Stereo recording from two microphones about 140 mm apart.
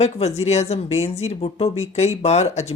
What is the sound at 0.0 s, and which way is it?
Speech, 50° left (ahead or behind).